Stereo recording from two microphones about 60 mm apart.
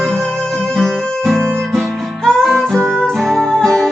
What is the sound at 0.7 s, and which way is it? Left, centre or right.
Guitar, centre.